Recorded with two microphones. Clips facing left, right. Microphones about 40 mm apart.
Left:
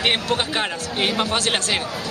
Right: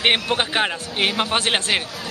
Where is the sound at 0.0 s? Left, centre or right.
Right.